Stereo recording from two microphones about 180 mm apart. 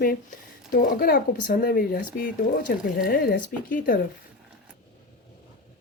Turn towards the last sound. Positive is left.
turn(degrees=50)  # may be behind; listen again after turning